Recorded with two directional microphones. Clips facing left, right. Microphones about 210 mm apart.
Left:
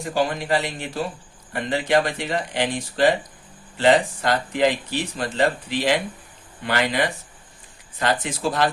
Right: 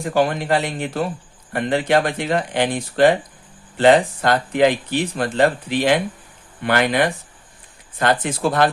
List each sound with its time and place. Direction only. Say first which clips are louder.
0.1 s speech: right 4 dB; 55° right (ahead or behind)